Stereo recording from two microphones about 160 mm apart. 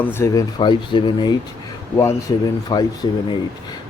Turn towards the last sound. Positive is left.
turn(degrees=25)  # may be behind; listen again after turning